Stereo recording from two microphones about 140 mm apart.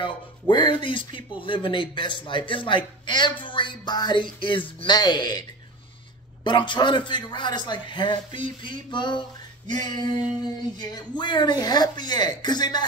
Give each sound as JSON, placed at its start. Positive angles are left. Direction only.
{"t": 0.0, "sound": "a woman's voice", "side_deg": 35}
{"t": 6.4, "sound": "a woman's voice", "side_deg": 35}